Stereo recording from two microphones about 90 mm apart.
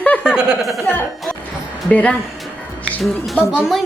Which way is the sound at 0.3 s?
10° right (ahead or behind).